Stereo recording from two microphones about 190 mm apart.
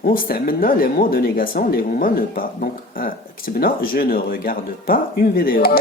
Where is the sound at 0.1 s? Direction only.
50° left (ahead or behind).